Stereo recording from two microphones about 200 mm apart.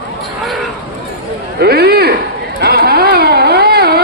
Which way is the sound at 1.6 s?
50° right (ahead or behind).